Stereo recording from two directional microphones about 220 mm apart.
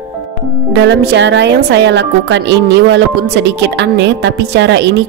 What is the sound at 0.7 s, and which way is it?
A woman's voice, 50° right (ahead or behind).